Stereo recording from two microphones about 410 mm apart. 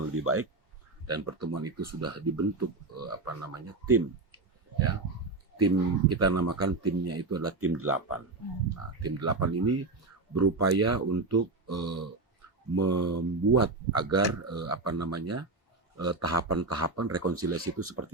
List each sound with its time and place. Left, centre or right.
0.2 s speech: right
5.6 s speech: right